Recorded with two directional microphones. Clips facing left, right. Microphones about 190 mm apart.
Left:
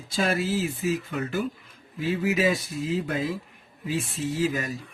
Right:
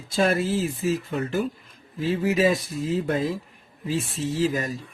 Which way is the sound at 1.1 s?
30° right (ahead or behind).